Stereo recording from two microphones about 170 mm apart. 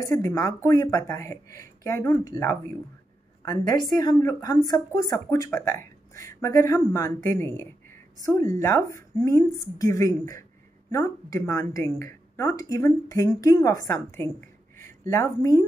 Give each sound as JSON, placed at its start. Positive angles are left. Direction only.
{"t": 0.0, "sound": "a woman's voice", "side_deg": 15}